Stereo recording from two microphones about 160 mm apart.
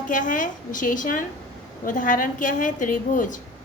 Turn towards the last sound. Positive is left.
turn(degrees=55)  # may be behind; listen again after turning